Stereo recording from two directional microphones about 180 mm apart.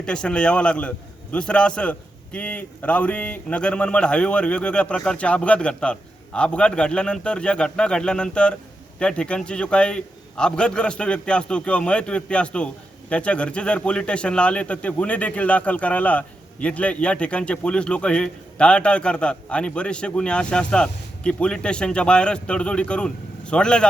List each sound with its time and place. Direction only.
0.0 s a man's voice: 5° left (ahead or behind)